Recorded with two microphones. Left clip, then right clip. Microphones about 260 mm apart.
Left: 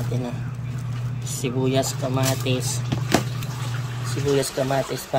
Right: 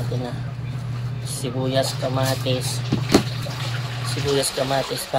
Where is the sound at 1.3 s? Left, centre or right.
Left.